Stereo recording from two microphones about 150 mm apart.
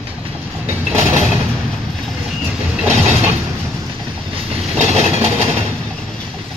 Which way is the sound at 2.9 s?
45° right (ahead or behind).